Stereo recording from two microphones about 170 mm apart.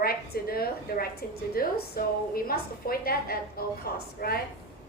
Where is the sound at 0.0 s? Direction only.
60° left (ahead or behind).